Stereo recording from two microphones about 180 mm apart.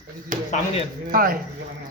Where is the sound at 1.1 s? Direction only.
50° right (ahead or behind).